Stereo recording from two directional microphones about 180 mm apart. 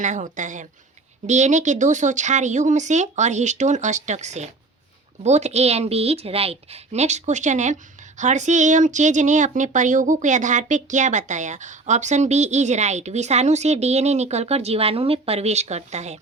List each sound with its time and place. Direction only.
0.0 s a woman's voice: 45° right (ahead or behind)